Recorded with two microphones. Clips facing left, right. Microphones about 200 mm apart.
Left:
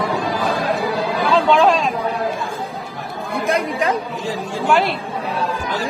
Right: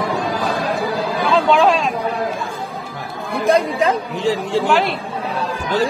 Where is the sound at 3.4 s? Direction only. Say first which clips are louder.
Right 4 dB; 30° right (ahead or behind).